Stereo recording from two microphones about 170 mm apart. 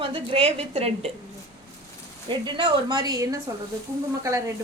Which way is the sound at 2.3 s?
30° right (ahead or behind).